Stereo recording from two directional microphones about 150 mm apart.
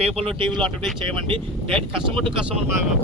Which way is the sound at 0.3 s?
35° right (ahead or behind).